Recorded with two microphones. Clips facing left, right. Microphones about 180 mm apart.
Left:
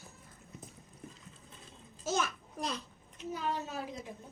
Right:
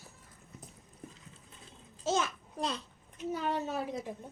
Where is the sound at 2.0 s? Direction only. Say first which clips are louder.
Right 2 dB; 25° right (ahead or behind).